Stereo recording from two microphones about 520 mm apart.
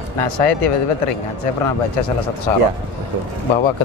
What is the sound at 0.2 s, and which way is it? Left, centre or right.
Speech, left.